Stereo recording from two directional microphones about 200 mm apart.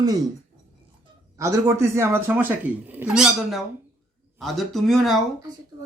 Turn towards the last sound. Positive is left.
turn(degrees=0)  # may be behind; listen again after turning